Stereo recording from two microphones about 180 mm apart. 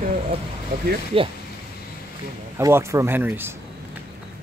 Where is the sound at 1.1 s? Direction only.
30° right (ahead or behind).